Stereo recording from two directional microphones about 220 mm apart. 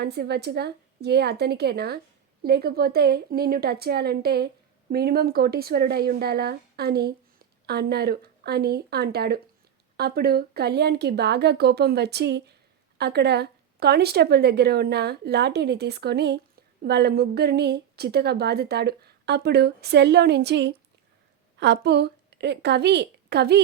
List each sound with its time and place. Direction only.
0.0 s a woman's voice: 50° right (ahead or behind)